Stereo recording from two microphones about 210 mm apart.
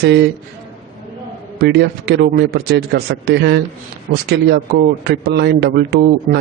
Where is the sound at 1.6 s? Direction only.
50° right (ahead or behind).